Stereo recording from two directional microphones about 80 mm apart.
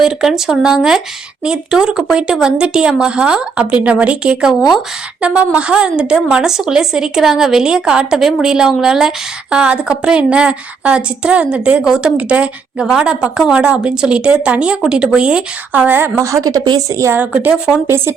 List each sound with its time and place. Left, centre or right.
0.0 s a woman's voice: centre
15.9 s a woman's voice: right
16.1 s a woman's voice: right
17.3 s a woman's voice: centre
17.8 s speech: right